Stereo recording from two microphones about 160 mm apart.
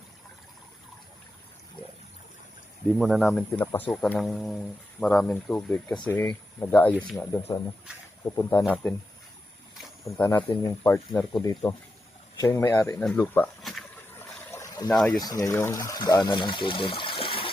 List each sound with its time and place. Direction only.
2.9 s speech: centre (ahead or behind)
10.2 s speech: 10° left (ahead or behind)
13.6 s a sound: centre (ahead or behind)
14.5 s a sound: 20° left (ahead or behind)
14.8 s speech: 10° left (ahead or behind)
15.1 s speech: 25° left (ahead or behind)